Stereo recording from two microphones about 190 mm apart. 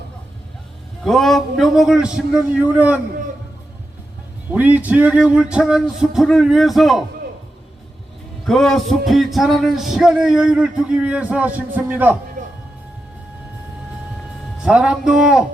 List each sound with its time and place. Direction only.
1.0 s a man's voice: centre (ahead or behind)
4.5 s a man's voice: 10° right (ahead or behind)
8.4 s a man's voice: centre (ahead or behind)
12.4 s music: 45° right (ahead or behind)
14.6 s a man's voice: 5° right (ahead or behind)